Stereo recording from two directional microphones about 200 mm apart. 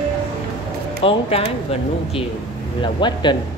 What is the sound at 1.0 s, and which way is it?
Speech, 30° left (ahead or behind).